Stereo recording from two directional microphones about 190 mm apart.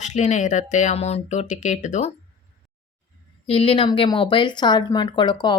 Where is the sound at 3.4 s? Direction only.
30° left (ahead or behind).